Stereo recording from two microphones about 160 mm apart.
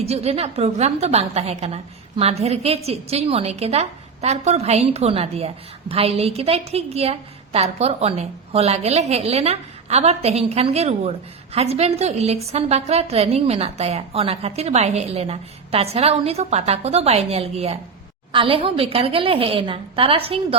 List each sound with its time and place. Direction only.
0.0 s a woman's voice: 40° right (ahead or behind)